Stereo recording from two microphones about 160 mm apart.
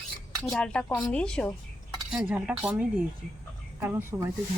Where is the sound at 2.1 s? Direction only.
5° right (ahead or behind).